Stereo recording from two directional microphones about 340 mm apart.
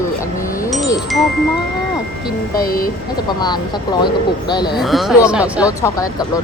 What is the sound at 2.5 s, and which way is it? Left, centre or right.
Speech, left.